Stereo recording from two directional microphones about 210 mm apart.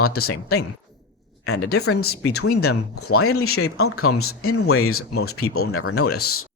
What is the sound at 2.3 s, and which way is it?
Speech, 90° left.